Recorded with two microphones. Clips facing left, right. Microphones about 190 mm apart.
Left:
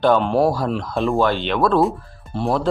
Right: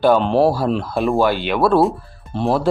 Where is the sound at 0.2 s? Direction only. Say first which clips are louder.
Right 2 dB; 25° right (ahead or behind).